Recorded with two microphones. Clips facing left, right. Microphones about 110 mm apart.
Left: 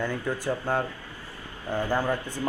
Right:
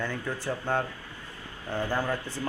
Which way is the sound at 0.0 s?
15° left (ahead or behind).